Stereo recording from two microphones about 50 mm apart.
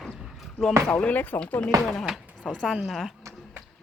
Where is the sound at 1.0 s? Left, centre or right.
Left.